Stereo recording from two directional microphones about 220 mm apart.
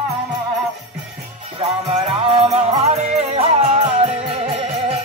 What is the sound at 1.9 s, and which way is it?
Music, 25° right (ahead or behind).